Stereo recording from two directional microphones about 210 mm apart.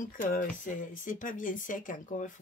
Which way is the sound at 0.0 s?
40° left (ahead or behind).